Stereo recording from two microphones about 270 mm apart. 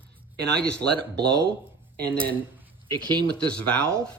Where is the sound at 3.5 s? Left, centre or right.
Centre.